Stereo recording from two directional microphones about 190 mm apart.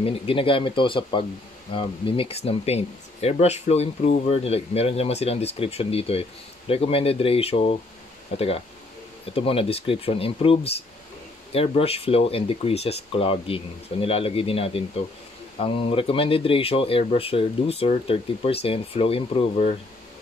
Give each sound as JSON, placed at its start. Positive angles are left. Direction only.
{"t": 0.0, "sound": "speech", "side_deg": 30}